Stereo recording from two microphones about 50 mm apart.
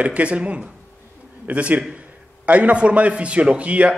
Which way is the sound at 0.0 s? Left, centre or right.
Right.